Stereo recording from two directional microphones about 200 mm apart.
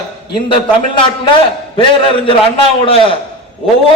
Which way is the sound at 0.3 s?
25° left (ahead or behind).